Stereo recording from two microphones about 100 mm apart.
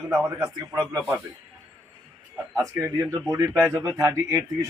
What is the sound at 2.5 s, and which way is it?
A man's voice, 30° right (ahead or behind).